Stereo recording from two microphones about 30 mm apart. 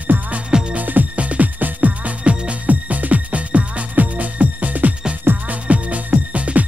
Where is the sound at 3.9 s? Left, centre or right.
Right.